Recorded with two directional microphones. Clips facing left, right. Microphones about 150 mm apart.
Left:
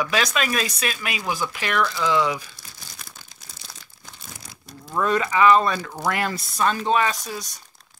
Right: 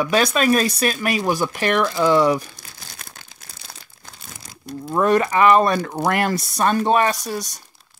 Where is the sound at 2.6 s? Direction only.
65° right (ahead or behind).